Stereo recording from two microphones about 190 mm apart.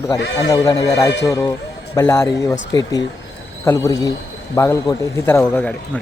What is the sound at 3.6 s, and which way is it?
A man's voice, 15° left (ahead or behind).